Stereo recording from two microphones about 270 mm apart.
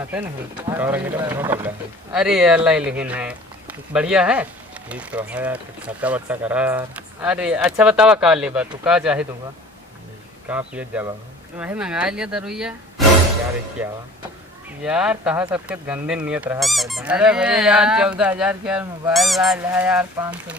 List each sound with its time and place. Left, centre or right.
0.7 s speech: centre
10.5 s speech: centre
13.0 s music: centre
13.8 s speech: centre